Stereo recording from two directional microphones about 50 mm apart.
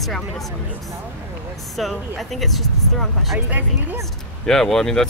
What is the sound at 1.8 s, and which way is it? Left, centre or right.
Speech, centre.